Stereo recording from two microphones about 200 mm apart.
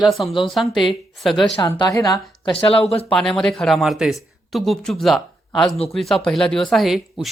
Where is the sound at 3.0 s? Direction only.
5° left (ahead or behind).